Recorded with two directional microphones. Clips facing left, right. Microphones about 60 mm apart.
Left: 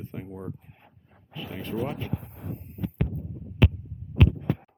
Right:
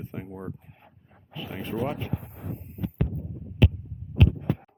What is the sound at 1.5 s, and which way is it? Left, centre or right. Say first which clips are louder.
Speech: right 1 dB; centre.